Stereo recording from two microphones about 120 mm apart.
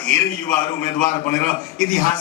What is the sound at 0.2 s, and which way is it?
A man's voice, 30° left (ahead or behind).